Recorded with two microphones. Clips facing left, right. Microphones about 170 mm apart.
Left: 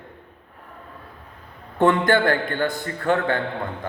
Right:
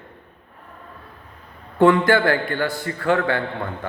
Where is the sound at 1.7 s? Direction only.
20° left (ahead or behind).